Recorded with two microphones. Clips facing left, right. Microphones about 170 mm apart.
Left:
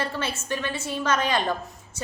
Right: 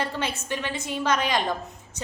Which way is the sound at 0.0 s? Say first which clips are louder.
Even; 15° right (ahead or behind).